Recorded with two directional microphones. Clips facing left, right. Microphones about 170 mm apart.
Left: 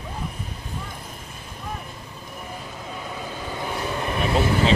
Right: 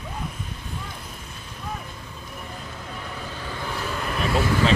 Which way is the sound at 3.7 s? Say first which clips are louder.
Left 2 dB; 20° left (ahead or behind).